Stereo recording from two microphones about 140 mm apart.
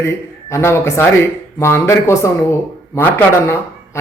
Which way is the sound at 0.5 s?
20° left (ahead or behind).